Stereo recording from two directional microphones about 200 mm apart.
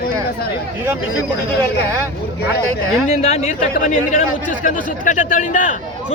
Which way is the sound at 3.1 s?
35° left (ahead or behind).